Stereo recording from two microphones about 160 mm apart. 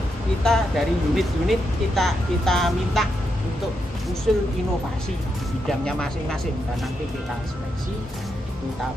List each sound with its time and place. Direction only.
0.4 s speech: centre (ahead or behind)
4.3 s speech: centre (ahead or behind)
5.7 s speech: 5° left (ahead or behind)